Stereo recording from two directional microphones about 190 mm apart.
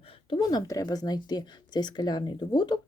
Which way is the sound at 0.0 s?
30° left (ahead or behind).